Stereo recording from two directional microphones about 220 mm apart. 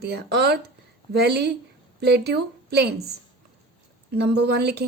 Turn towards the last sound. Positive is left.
turn(degrees=-50)  # may be behind; listen again after turning